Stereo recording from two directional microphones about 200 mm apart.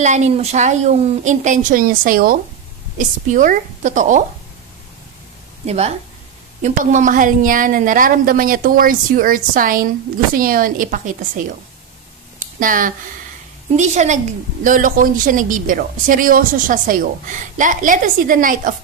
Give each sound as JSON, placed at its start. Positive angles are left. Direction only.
{"t": 0.0, "sound": "a woman's voice", "side_deg": -35}
{"t": 5.7, "sound": "a woman's voice", "side_deg": -30}
{"t": 12.4, "sound": "a sound", "side_deg": -45}
{"t": 13.7, "sound": "a woman's voice", "side_deg": -35}